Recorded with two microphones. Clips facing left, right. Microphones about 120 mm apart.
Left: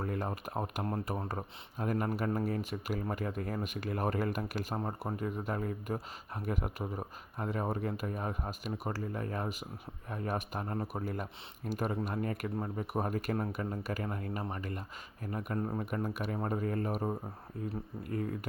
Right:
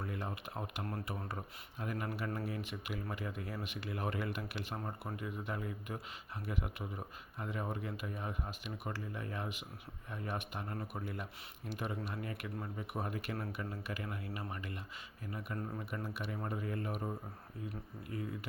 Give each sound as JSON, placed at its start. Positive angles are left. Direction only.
{"t": 0.0, "sound": "speech", "side_deg": 45}